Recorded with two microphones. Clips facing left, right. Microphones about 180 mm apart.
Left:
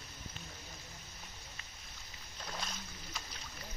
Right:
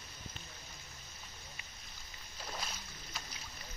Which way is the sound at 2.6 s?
5° right (ahead or behind).